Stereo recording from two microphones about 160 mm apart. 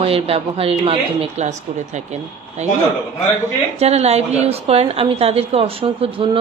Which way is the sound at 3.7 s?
40° right (ahead or behind).